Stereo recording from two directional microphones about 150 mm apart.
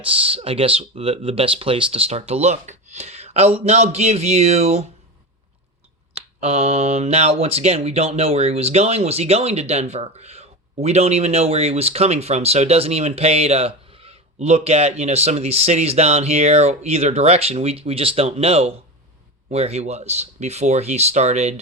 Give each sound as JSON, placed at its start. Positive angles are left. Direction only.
{"t": 0.0, "sound": "speech", "side_deg": -40}
{"t": 6.4, "sound": "speech", "side_deg": -45}